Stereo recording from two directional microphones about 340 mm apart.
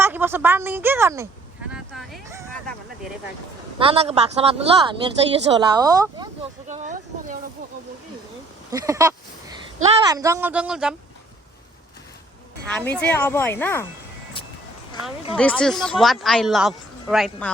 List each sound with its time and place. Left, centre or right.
0.0 s a woman's voice: centre
1.7 s a sound: centre
3.8 s a woman's voice: centre
8.7 s a woman's voice: centre
12.6 s speech: centre
15.4 s speech: centre